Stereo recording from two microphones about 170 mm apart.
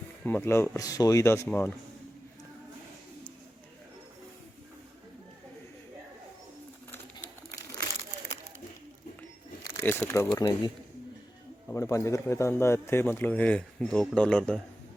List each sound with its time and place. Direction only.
0.3 s speech: 10° left (ahead or behind)
9.8 s speech: 10° left (ahead or behind)
11.7 s speech: 15° left (ahead or behind)